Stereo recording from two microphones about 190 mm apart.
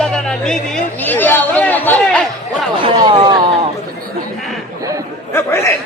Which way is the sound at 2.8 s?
30° right (ahead or behind).